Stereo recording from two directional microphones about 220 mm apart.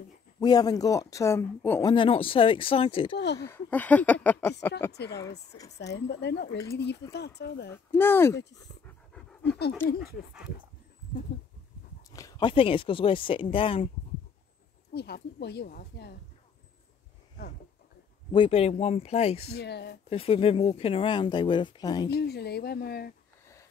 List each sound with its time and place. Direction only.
0.4 s speech: 15° left (ahead or behind)
3.3 s speech: 10° left (ahead or behind)
5.7 s a woman's voice: 50° left (ahead or behind)
7.7 s speech: 10° left (ahead or behind)
8.4 s a woman's voice: 50° left (ahead or behind)
8.8 s pant: centre (ahead or behind)
9.8 s a woman's voice: 45° left (ahead or behind)
12.1 s speech: 15° left (ahead or behind)
15.0 s a woman's voice: 45° left (ahead or behind)
18.3 s speech: 25° left (ahead or behind)
19.5 s a woman's voice: 50° left (ahead or behind)
20.1 s speech: 25° left (ahead or behind)
22.1 s a woman's voice: 45° left (ahead or behind)